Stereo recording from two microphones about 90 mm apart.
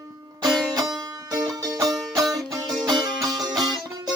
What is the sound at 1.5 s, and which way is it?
Music, 45° right (ahead or behind).